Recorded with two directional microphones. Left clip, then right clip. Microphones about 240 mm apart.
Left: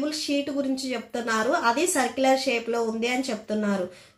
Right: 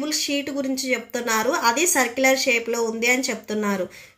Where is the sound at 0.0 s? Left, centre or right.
Right.